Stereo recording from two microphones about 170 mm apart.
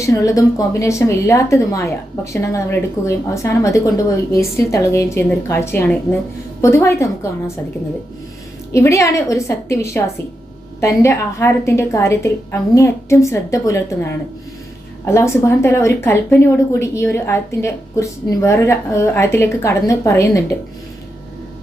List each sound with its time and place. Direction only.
0.0 s speech: 20° left (ahead or behind)
8.7 s speech: 15° left (ahead or behind)